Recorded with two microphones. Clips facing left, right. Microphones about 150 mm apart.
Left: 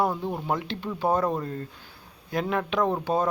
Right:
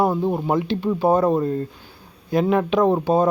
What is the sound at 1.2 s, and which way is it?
Speech, 25° right (ahead or behind).